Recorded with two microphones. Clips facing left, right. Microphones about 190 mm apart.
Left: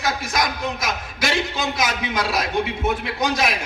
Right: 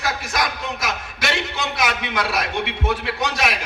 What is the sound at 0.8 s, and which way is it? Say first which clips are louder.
A man's voice: left 1 dB; 65° right (ahead or behind).